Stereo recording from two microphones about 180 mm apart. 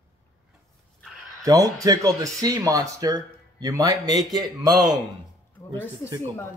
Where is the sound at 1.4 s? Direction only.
20° right (ahead or behind).